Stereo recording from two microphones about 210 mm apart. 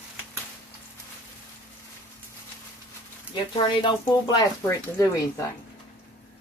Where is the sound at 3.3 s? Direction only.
20° left (ahead or behind).